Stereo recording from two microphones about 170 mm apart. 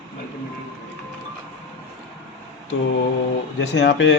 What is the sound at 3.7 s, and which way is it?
Speech, 90° left.